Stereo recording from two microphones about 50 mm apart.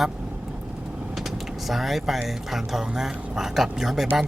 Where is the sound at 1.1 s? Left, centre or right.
Centre.